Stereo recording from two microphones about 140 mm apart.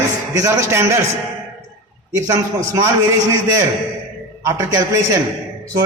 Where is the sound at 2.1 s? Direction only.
25° right (ahead or behind).